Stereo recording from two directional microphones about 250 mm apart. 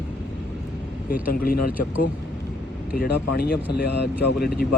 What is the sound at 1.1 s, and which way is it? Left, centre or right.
Speech, left.